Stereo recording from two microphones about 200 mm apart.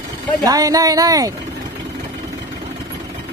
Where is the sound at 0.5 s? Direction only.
15° right (ahead or behind).